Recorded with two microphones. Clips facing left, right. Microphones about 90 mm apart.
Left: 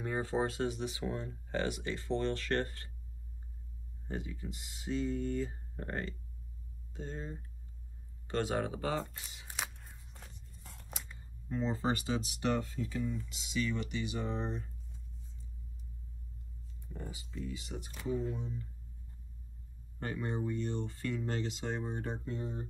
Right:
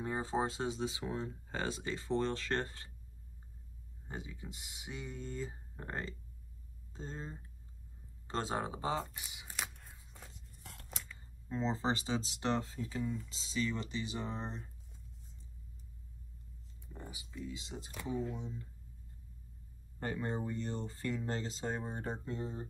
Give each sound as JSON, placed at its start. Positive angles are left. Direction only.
{"t": 0.0, "sound": "speech", "side_deg": -30}
{"t": 4.1, "sound": "speech", "side_deg": -20}
{"t": 9.5, "sound": "a sound", "side_deg": 0}
{"t": 11.5, "sound": "speech", "side_deg": -25}
{"t": 16.9, "sound": "speech", "side_deg": -20}
{"t": 18.1, "sound": "speech", "side_deg": 0}
{"t": 20.1, "sound": "speech", "side_deg": -30}